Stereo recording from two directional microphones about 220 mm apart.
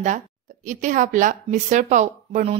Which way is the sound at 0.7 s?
35° right (ahead or behind).